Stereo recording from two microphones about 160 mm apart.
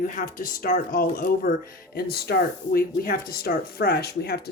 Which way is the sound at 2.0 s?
80° left.